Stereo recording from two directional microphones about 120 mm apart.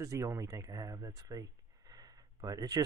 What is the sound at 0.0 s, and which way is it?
Speech, 25° right (ahead or behind).